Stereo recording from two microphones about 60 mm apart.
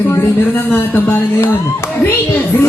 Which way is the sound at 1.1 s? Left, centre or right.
Left.